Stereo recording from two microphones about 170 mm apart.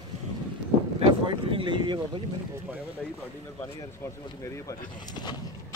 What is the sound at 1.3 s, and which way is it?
Speech, 30° right (ahead or behind).